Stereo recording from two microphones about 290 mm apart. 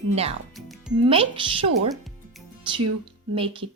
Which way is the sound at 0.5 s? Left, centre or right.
Centre.